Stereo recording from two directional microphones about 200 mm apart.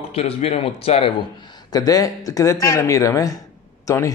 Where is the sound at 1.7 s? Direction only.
20° left (ahead or behind).